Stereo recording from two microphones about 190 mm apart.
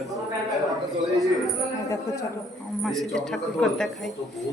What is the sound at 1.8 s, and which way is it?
Speech, 15° left (ahead or behind).